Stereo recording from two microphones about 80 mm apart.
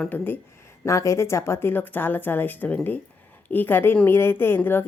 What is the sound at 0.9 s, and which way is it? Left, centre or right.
Speech, left.